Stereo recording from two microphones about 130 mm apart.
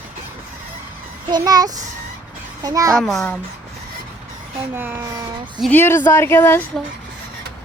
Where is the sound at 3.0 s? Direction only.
Centre (ahead or behind).